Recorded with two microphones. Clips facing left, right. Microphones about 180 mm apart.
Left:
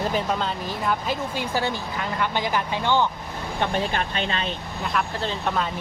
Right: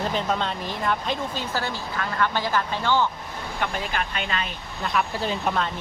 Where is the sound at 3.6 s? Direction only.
30° left (ahead or behind).